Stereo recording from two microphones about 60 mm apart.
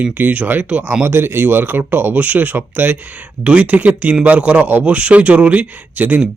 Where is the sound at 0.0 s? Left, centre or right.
Right.